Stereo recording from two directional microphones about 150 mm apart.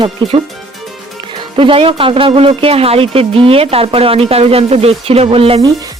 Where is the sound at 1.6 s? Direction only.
35° right (ahead or behind).